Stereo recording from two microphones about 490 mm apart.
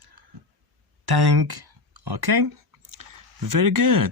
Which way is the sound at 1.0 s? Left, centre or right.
Right.